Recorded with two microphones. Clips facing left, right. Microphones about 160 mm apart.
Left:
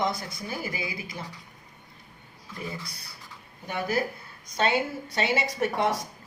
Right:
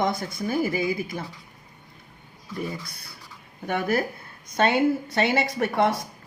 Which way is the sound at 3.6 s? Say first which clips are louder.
Right 4 dB; 60° right (ahead or behind).